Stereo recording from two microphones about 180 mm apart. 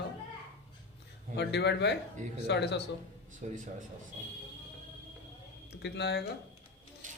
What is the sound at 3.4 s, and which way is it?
Speech, 45° right (ahead or behind).